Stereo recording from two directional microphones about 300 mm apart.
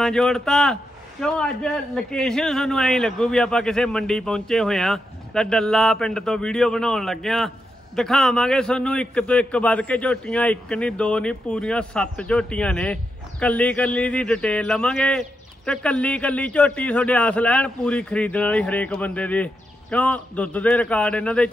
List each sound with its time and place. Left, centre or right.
0.0 s a man's voice: centre